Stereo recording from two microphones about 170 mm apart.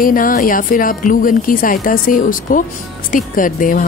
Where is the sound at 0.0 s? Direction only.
50° left (ahead or behind).